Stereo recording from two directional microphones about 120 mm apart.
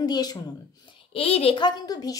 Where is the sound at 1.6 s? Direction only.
35° left (ahead or behind).